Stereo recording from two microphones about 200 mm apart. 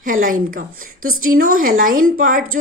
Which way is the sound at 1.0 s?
90° right.